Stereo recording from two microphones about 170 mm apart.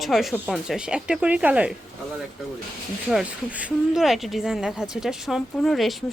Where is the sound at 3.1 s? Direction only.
10° right (ahead or behind).